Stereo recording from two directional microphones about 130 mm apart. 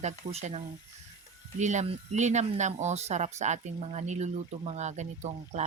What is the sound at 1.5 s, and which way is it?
Speech, 65° right (ahead or behind).